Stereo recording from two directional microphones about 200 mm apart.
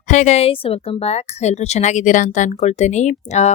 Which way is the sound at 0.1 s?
35° left (ahead or behind).